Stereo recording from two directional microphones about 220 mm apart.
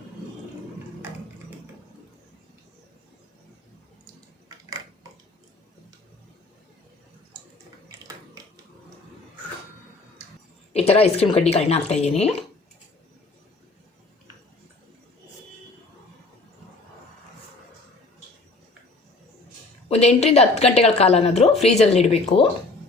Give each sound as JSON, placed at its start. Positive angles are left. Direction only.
{"t": 10.7, "sound": "speech", "side_deg": 30}
{"t": 19.9, "sound": "speech", "side_deg": 30}